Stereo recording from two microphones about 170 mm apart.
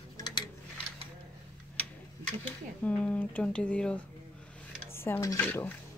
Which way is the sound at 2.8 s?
5° left (ahead or behind).